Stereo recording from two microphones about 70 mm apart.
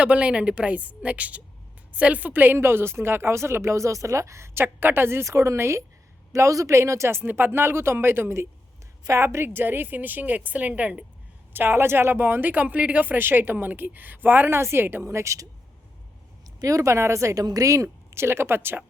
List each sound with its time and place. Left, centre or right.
0.0 s speech: centre
11.5 s speech: right
15.1 s speech: right
16.6 s speech: right
17.4 s speech: right
17.8 s speech: right